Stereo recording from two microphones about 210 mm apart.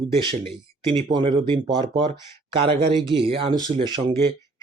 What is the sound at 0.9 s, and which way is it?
Speech, 25° right (ahead or behind).